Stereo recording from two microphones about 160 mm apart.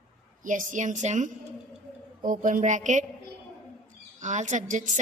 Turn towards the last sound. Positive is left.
turn(degrees=-50)  # may be behind; listen again after turning